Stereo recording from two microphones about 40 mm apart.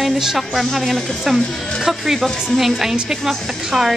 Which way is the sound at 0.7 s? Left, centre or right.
Centre.